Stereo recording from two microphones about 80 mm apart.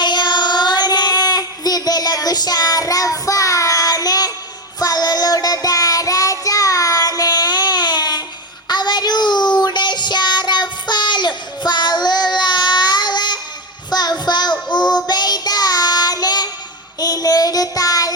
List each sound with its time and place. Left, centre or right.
0.0 s child singing: left